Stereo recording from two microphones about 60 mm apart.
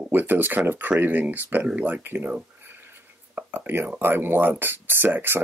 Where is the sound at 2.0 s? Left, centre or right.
Right.